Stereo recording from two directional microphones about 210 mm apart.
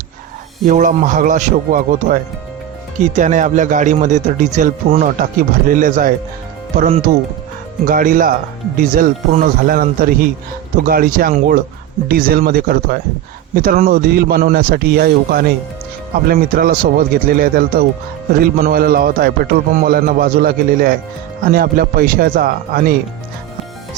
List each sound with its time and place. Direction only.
0.7 s speech: 40° right (ahead or behind)
3.2 s speech: 35° right (ahead or behind)